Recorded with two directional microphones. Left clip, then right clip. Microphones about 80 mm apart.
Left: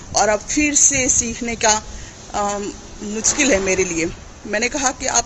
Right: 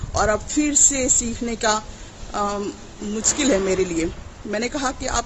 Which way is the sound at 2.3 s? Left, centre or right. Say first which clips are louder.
Left 2 dB; centre.